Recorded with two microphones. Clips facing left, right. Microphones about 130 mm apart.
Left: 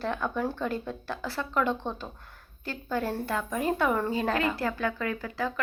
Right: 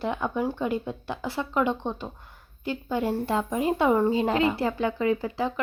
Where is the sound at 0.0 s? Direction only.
15° right (ahead or behind).